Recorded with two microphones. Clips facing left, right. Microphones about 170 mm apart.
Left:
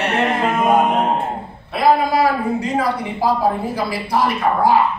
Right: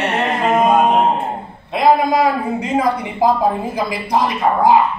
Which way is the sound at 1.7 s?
20° right (ahead or behind).